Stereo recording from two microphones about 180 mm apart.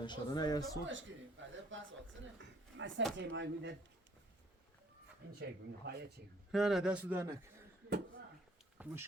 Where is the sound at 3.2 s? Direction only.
85° right.